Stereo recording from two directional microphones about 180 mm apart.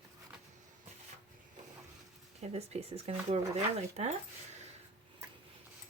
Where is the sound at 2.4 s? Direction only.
35° right (ahead or behind).